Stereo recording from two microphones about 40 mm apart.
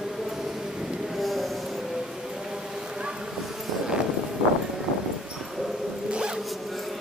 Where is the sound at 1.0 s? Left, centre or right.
Centre.